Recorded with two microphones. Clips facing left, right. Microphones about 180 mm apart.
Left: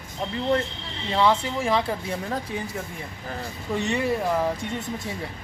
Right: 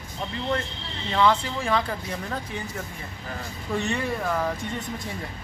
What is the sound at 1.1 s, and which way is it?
Speech, 25° left (ahead or behind).